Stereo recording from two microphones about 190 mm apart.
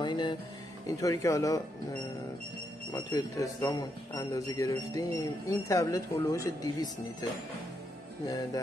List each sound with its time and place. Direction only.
0.0 s music: 25° left (ahead or behind)
0.8 s speech: 15° left (ahead or behind)
2.9 s a man's voice: 20° left (ahead or behind)